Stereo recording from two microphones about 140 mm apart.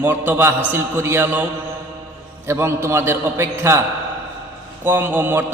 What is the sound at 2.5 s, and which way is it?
A man's voice, 20° right (ahead or behind).